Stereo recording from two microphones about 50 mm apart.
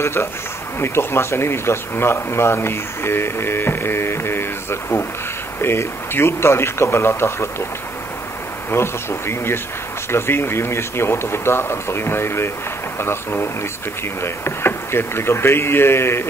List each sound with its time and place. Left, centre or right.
0.0 s speech: left
8.6 s speech: left